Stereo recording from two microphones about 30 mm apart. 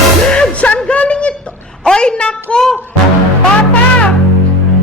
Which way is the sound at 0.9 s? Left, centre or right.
Left.